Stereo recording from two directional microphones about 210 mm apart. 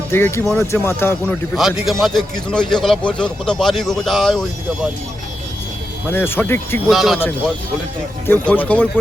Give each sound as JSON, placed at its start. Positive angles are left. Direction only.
{"t": 0.1, "sound": "speech", "side_deg": 10}
{"t": 1.5, "sound": "speech", "side_deg": 0}
{"t": 6.1, "sound": "speech", "side_deg": 10}